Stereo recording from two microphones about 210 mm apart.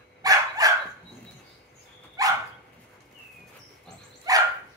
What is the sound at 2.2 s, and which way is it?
Dog, 15° right (ahead or behind).